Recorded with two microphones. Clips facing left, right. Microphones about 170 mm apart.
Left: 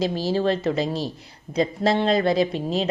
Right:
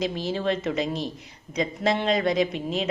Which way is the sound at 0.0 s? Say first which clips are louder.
Left 4 dB; 35° left (ahead or behind).